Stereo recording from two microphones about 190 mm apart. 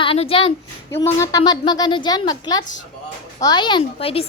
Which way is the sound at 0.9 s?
15° left (ahead or behind).